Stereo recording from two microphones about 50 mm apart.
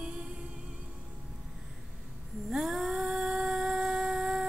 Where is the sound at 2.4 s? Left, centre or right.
Centre.